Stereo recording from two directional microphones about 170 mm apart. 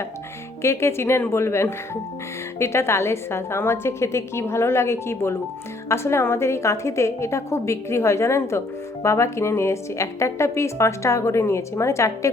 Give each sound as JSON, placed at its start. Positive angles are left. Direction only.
{"t": 0.6, "sound": "a woman's voice", "side_deg": 15}